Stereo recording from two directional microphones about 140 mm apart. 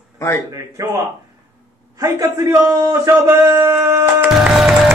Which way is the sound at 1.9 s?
25° right (ahead or behind).